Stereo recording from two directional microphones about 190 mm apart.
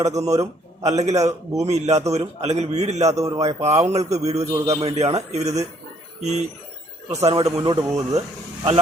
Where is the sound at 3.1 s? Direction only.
15° right (ahead or behind).